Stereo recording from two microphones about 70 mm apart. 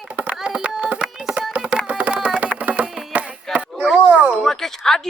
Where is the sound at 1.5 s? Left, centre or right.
Centre.